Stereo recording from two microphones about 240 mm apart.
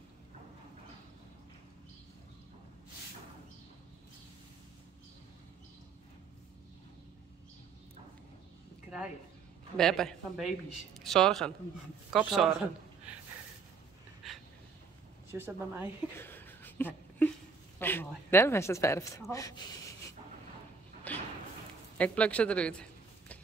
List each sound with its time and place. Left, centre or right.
9.8 s a woman's voice: centre
15.3 s a woman's voice: centre
16.2 s a sound: centre
17.7 s speech: centre
21.1 s thump: centre
21.9 s speech: centre